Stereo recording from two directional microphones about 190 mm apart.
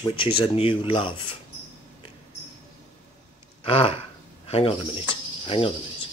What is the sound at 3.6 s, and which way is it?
Speech, 30° left (ahead or behind).